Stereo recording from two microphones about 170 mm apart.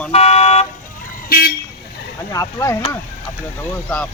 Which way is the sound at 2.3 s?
15° left (ahead or behind).